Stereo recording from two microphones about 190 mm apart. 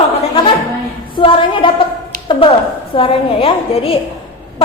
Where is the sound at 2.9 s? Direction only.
30° left (ahead or behind).